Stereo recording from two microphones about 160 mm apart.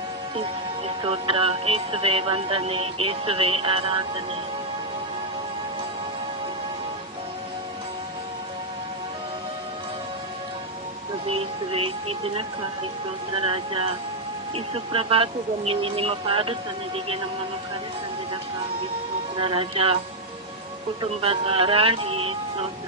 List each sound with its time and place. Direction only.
0.4 s speech: 40° right (ahead or behind)
11.2 s speech: 35° right (ahead or behind)
19.3 s speech: 35° right (ahead or behind)
21.0 s speech: 35° right (ahead or behind)